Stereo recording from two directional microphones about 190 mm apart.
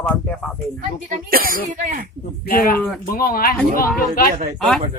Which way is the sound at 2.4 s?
50° left (ahead or behind).